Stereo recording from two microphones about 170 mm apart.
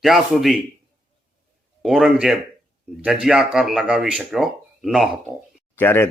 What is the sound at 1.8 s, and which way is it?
A man's voice, centre (ahead or behind).